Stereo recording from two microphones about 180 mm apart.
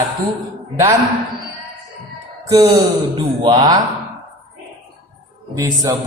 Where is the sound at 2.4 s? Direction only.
20° right (ahead or behind).